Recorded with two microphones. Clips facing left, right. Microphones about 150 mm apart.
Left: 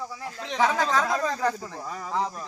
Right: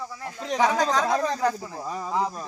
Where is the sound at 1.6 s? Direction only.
10° right (ahead or behind).